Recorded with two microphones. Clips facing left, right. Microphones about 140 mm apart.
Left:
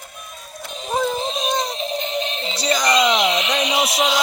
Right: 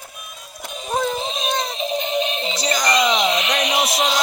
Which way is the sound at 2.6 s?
5° left (ahead or behind).